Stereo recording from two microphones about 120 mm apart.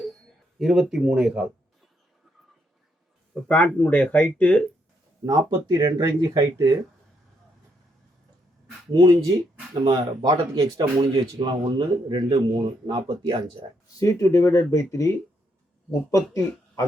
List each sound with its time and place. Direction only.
0.6 s speech: 5° right (ahead or behind)
3.5 s speech: 10° left (ahead or behind)
5.2 s speech: 30° right (ahead or behind)
8.9 s speech: 35° right (ahead or behind)
14.0 s speech: 25° left (ahead or behind)